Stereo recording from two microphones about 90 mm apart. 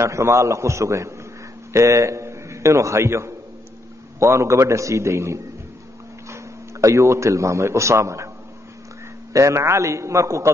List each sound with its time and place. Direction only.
0.0 s a man's voice: 35° right (ahead or behind)
9.3 s a man's voice: 35° right (ahead or behind)